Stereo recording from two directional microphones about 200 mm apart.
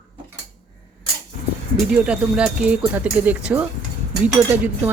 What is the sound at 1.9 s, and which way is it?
Speech, 5° right (ahead or behind).